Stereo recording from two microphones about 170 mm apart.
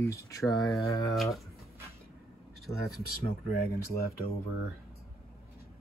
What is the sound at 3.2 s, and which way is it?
Speech, 65° left (ahead or behind).